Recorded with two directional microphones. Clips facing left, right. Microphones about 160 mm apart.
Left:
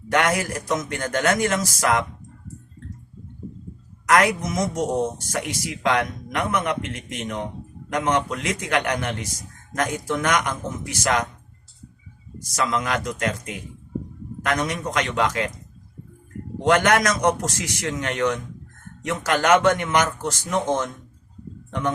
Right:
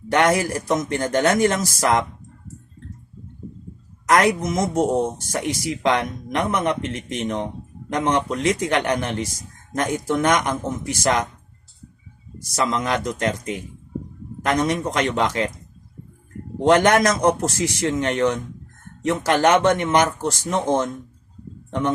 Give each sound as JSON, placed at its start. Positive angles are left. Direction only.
{"t": 0.1, "sound": "speech", "side_deg": -30}
{"t": 4.0, "sound": "a man's voice", "side_deg": -30}
{"t": 12.7, "sound": "a man's voice", "side_deg": -30}
{"t": 16.6, "sound": "a man's voice", "side_deg": -30}